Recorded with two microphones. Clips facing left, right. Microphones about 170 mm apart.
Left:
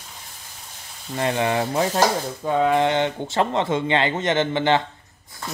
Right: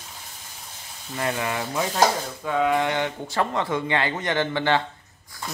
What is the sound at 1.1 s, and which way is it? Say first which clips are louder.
Speech: left 5 dB; 25° left (ahead or behind).